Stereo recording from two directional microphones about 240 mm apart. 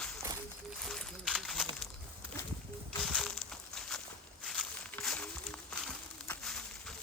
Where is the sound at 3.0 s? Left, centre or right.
Centre.